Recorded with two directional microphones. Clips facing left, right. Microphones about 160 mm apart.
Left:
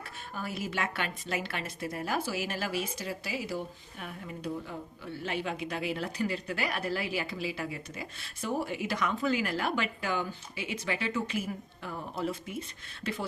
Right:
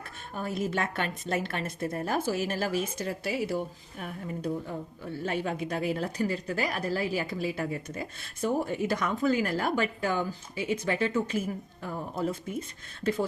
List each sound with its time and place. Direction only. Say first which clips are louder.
0.7 s speech: right 3 dB; 45° right (ahead or behind)
5.2 s speech: right 3 dB; 45° right (ahead or behind)